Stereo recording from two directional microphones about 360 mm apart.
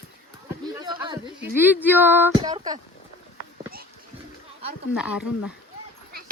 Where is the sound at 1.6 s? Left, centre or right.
Centre.